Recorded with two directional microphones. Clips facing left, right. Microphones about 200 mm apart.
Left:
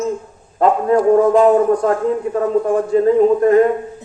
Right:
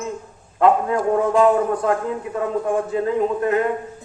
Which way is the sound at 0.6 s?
40° left (ahead or behind).